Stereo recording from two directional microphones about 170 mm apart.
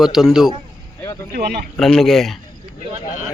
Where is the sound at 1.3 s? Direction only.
70° right (ahead or behind).